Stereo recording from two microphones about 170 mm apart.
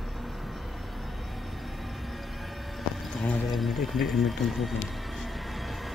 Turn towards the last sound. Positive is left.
turn(degrees=0)  # may be behind; listen again after turning